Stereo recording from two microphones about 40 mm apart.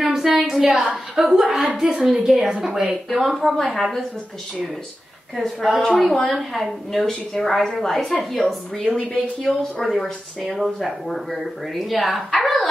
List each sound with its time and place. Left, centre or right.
0.0 s a sound: centre
0.4 s a woman's voice: centre
3.1 s a woman's voice: centre
5.3 s a woman's voice: centre
5.8 s a woman's voice: centre
10.5 s a woman's voice: centre